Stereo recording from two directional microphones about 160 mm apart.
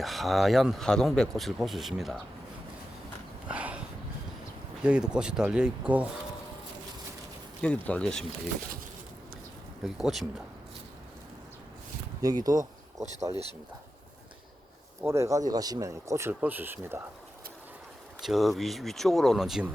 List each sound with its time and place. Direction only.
0.0 s speech: centre (ahead or behind)
3.5 s a sound: 10° right (ahead or behind)
4.8 s speech: 5° right (ahead or behind)
7.6 s speech: 5° left (ahead or behind)
9.8 s speech: centre (ahead or behind)
12.2 s speech: 25° right (ahead or behind)
15.0 s speech: 15° right (ahead or behind)
18.2 s speech: centre (ahead or behind)